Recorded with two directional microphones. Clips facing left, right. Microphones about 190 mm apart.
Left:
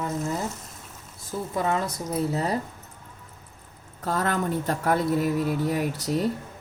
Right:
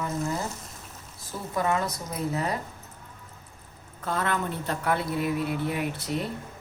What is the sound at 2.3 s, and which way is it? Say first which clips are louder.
Speech: left 2 dB; 30° left (ahead or behind).